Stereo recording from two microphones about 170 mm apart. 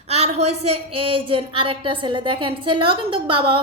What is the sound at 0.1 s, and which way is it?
A woman's voice, 40° right (ahead or behind).